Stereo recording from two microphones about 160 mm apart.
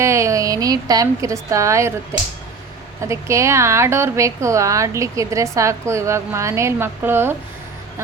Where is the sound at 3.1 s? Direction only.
20° right (ahead or behind).